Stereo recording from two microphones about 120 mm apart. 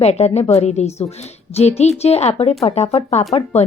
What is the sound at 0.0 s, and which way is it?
A woman's voice, 65° left (ahead or behind).